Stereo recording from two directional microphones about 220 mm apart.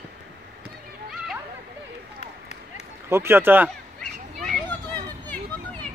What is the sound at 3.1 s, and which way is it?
Speech, 10° right (ahead or behind).